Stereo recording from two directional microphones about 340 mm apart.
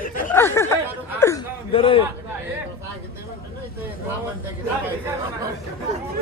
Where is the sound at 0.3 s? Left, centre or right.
Centre.